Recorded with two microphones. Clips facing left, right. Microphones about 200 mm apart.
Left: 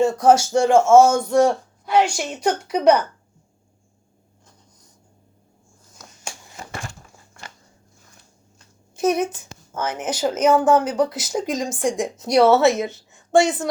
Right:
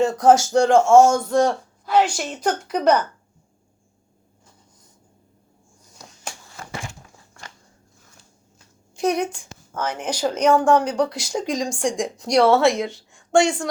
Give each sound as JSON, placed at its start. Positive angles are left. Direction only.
{"t": 0.0, "sound": "a woman's voice", "side_deg": 0}
{"t": 6.4, "sound": "a sound", "side_deg": 20}
{"t": 9.0, "sound": "a woman's voice", "side_deg": 5}